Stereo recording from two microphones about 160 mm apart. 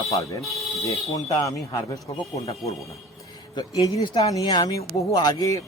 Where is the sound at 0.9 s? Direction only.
20° left (ahead or behind).